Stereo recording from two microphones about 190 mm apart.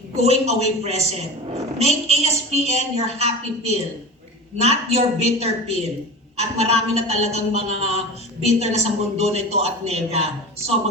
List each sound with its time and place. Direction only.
0.2 s a woman's voice: 35° right (ahead or behind)